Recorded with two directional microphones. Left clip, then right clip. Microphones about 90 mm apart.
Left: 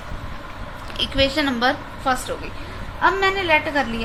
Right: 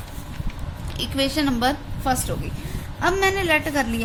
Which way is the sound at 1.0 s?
55° right (ahead or behind).